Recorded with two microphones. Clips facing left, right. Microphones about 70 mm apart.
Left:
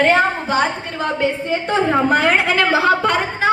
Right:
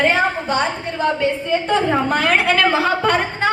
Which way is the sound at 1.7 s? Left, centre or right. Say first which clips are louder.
Left 3 dB; centre.